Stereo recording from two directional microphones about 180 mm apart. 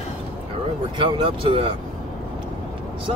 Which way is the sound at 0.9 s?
30° right (ahead or behind).